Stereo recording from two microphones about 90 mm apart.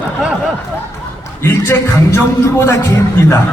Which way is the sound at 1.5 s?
30° left (ahead or behind).